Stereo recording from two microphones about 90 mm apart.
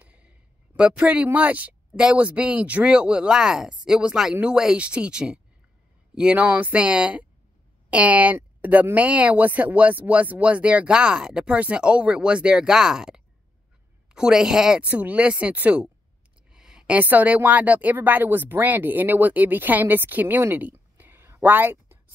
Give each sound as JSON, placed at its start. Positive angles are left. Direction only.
{"t": 0.0, "sound": "a woman's voice", "side_deg": -15}